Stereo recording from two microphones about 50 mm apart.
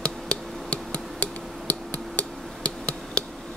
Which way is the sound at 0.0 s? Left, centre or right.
Left.